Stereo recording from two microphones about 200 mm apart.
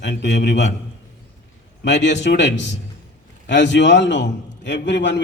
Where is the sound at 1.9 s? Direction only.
60° left (ahead or behind).